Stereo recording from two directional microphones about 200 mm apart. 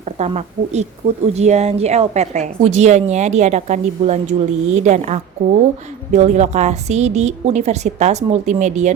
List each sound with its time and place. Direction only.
0.0 s a woman's voice: 35° right (ahead or behind)